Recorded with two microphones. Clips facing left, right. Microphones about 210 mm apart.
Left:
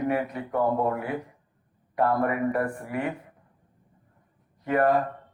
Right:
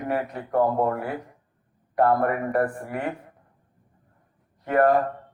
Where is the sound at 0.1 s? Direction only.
50° right (ahead or behind).